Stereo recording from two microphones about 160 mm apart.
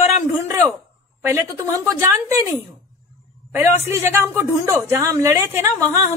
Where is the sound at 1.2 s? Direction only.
15° right (ahead or behind).